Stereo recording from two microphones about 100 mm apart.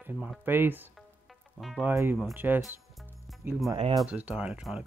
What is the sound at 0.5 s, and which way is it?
Speech, 20° right (ahead or behind).